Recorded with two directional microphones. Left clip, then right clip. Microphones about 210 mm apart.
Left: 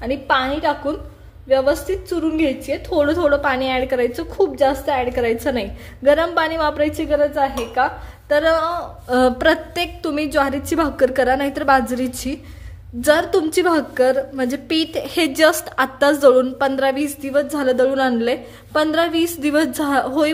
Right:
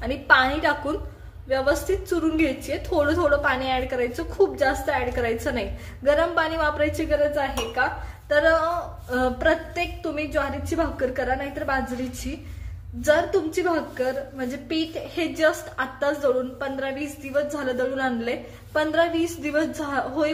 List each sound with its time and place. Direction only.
0.0 s a woman's voice: 20° left (ahead or behind)
1.5 s a woman's voice: 25° left (ahead or behind); by 20.2 s 40° left (ahead or behind)